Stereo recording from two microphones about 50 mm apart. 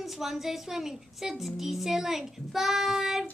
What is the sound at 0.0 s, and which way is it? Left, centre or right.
A woman's voice, centre.